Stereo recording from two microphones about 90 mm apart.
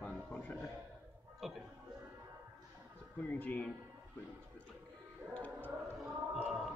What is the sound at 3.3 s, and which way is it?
Speech, 15° left (ahead or behind).